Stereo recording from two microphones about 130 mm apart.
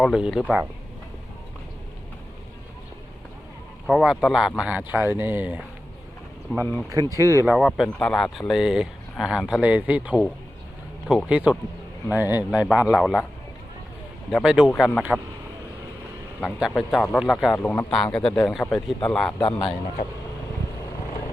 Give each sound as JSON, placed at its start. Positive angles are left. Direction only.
{"t": 0.0, "sound": "speech", "side_deg": -5}
{"t": 3.8, "sound": "speech", "side_deg": -5}
{"t": 6.6, "sound": "speech", "side_deg": 15}
{"t": 6.9, "sound": "speech", "side_deg": -25}
{"t": 7.4, "sound": "speech", "side_deg": 0}
{"t": 11.3, "sound": "speech", "side_deg": -10}
{"t": 14.4, "sound": "speech", "side_deg": -5}
{"t": 14.7, "sound": "speech", "side_deg": 5}
{"t": 16.4, "sound": "speech", "side_deg": 0}
{"t": 19.4, "sound": "speech", "side_deg": 35}